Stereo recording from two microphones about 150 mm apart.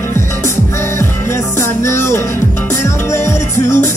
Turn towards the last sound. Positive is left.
turn(degrees=20)  # may be behind; listen again after turning